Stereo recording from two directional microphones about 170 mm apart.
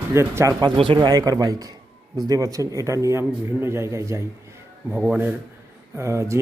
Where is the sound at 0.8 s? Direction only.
30° right (ahead or behind).